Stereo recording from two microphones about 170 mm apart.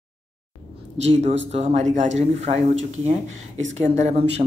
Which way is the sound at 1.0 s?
40° right (ahead or behind).